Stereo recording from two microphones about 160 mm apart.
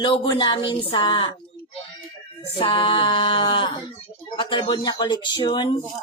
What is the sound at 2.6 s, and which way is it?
Speech, 30° left (ahead or behind).